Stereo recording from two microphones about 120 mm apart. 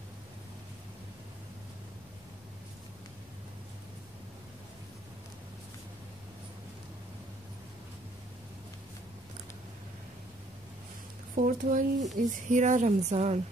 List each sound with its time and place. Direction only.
11.3 s a woman's voice: 90° right; by 13.4 s 65° right (ahead or behind)